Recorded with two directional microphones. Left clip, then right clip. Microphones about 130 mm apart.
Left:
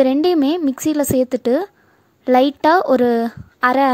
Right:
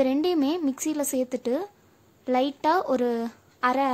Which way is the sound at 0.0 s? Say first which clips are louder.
Left 9 dB; 45° left (ahead or behind).